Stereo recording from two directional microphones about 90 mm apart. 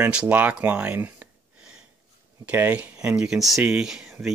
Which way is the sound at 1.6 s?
10° right (ahead or behind).